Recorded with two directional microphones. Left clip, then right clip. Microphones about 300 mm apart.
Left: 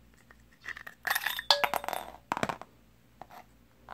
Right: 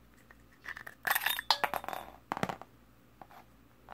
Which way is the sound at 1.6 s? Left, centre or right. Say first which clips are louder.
Left 4 dB; centre.